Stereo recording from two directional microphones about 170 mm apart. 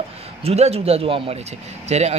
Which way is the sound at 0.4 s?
40° right (ahead or behind).